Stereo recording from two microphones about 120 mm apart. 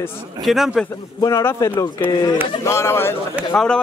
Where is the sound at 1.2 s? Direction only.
25° left (ahead or behind).